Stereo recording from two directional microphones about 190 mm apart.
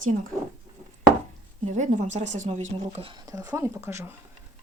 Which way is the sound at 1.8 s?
40° right (ahead or behind).